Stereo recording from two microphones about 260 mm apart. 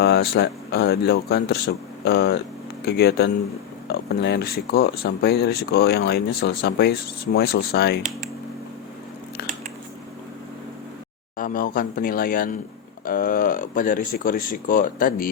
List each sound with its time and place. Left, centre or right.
0.0 s speech: left
11.3 s speech: left